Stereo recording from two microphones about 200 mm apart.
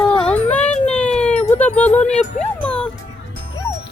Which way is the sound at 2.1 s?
35° left (ahead or behind).